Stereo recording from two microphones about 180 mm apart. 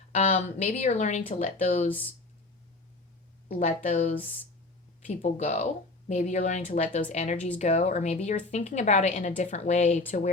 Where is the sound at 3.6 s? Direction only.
40° left (ahead or behind).